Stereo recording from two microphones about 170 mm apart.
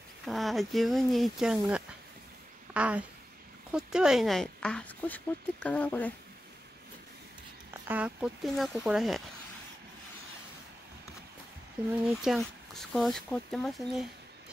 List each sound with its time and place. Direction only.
0.2 s speech: centre (ahead or behind)
7.9 s speech: 5° right (ahead or behind)
11.9 s speech: 5° right (ahead or behind)